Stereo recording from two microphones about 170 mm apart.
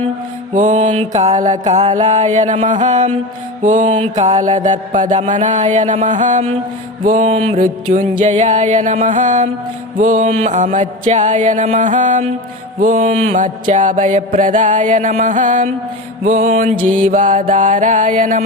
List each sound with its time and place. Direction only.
0.5 s mantra: 45° right (ahead or behind)
7.6 s mantra: 55° right (ahead or behind)